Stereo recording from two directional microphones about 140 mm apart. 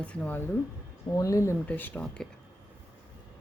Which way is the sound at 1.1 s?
25° left (ahead or behind).